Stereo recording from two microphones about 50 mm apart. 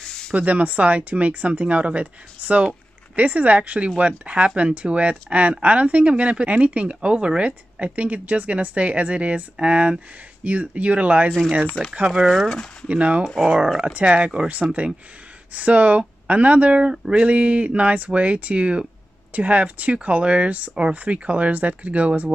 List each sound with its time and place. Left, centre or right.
0.0 s a sound: centre
0.3 s speech: right
11.8 s speech: centre
12.8 s speech: right